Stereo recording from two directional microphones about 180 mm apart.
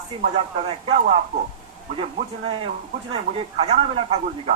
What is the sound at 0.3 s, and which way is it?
Speech, 35° right (ahead or behind).